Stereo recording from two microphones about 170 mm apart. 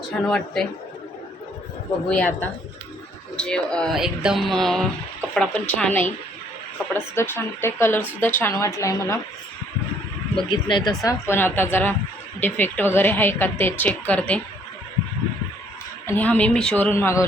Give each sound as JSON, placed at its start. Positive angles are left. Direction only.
{"t": 0.3, "sound": "speech", "side_deg": 5}
{"t": 2.0, "sound": "speech", "side_deg": 10}
{"t": 10.3, "sound": "speech", "side_deg": 25}
{"t": 16.0, "sound": "speech", "side_deg": 10}